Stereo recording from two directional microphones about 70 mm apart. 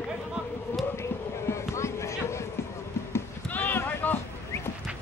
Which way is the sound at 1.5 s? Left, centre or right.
Left.